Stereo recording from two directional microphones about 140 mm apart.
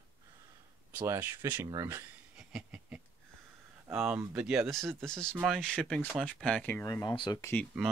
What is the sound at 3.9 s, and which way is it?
Speech, 5° right (ahead or behind).